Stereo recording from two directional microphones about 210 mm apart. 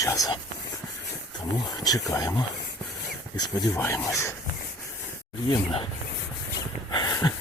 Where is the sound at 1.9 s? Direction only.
15° left (ahead or behind).